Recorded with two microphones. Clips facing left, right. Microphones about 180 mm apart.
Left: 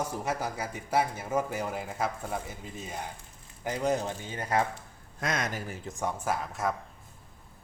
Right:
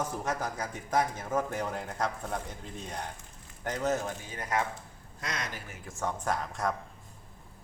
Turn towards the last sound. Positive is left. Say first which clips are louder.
# left 1 dB
turn(degrees=5)  # may be behind; listen again after turning